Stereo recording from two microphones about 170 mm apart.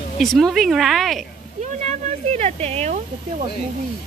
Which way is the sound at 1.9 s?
40° right (ahead or behind).